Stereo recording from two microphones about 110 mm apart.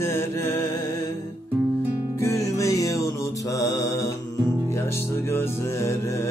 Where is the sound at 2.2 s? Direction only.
30° left (ahead or behind).